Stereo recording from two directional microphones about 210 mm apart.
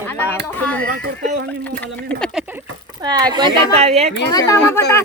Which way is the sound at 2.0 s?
5° left (ahead or behind).